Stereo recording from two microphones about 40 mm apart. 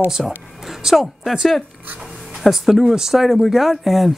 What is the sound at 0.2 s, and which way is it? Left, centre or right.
Speech, centre.